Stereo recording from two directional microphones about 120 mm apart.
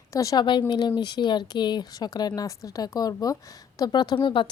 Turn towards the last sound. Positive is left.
turn(degrees=45)  # may be behind; listen again after turning